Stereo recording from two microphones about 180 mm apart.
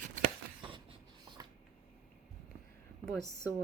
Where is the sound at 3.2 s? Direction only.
20° left (ahead or behind).